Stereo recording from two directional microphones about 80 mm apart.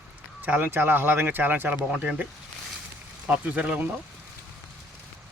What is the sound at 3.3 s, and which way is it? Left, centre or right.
Speech, centre.